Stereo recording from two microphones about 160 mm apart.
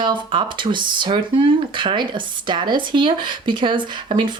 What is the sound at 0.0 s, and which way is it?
Speech, 30° right (ahead or behind).